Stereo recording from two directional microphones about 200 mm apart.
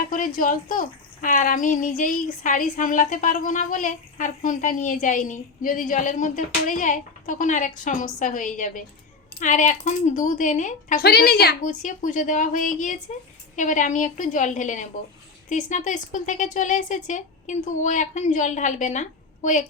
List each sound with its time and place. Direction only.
0.1 s a woman's voice: 45° left (ahead or behind)